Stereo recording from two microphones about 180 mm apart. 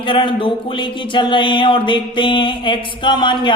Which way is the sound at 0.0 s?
30° left (ahead or behind).